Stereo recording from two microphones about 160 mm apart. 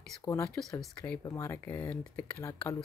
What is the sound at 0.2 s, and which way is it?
Speech, 20° left (ahead or behind).